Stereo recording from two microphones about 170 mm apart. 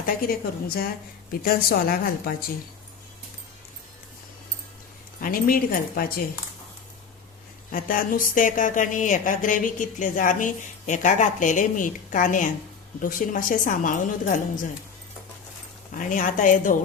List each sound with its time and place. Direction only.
0.0 s a woman's voice: 60° left (ahead or behind)
5.2 s a woman's voice: 55° left (ahead or behind)
7.7 s speech: 55° left (ahead or behind)
16.0 s speech: 50° left (ahead or behind)